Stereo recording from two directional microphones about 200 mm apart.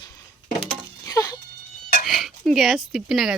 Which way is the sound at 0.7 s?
15° left (ahead or behind).